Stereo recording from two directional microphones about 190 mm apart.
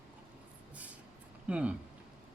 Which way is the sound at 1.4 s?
5° right (ahead or behind).